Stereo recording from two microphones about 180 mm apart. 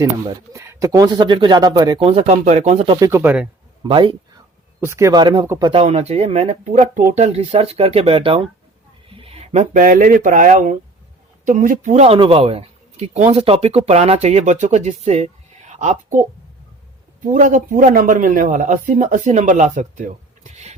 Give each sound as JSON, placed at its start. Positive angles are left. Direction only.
{"t": 0.0, "sound": "speech", "side_deg": -15}
{"t": 2.0, "sound": "speech", "side_deg": -35}
{"t": 3.0, "sound": "speech", "side_deg": -15}
{"t": 3.8, "sound": "speech", "side_deg": -25}
{"t": 4.8, "sound": "speech", "side_deg": -15}
{"t": 17.2, "sound": "speech", "side_deg": -45}